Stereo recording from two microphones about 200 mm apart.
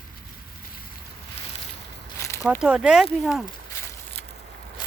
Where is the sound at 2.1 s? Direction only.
15° left (ahead or behind).